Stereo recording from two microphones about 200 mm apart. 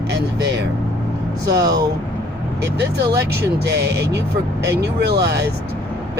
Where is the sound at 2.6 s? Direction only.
55° right (ahead or behind).